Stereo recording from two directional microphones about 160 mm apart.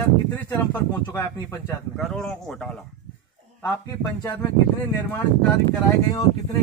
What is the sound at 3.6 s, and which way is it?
Speech, 20° left (ahead or behind).